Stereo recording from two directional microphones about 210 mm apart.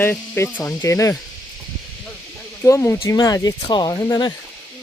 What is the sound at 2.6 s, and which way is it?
Speech, 10° left (ahead or behind).